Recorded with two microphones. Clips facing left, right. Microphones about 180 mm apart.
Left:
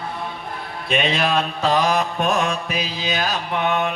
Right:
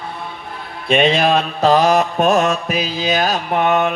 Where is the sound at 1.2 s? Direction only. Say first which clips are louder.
Right 5 dB; 40° right (ahead or behind).